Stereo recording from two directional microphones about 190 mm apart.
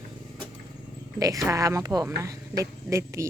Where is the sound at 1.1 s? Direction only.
20° right (ahead or behind).